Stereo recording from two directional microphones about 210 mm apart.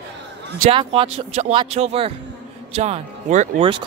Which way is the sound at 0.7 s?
25° right (ahead or behind).